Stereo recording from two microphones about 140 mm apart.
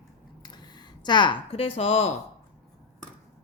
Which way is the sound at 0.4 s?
30° left (ahead or behind).